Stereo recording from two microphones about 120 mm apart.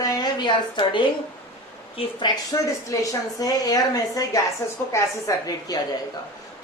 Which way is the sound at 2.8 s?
30° left (ahead or behind).